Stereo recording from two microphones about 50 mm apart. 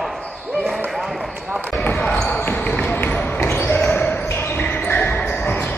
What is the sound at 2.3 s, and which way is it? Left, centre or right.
Basketball bounce, left.